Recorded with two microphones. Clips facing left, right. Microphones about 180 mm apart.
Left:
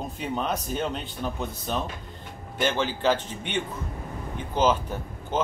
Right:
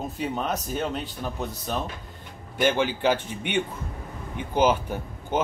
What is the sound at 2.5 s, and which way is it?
Speech, 10° right (ahead or behind).